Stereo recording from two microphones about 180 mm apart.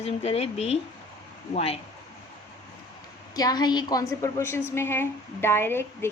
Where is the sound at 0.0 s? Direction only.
35° left (ahead or behind).